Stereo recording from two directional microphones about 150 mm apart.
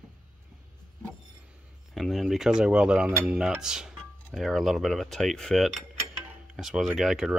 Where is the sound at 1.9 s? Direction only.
Centre (ahead or behind).